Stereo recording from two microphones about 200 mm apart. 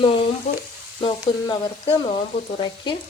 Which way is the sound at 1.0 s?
25° left (ahead or behind).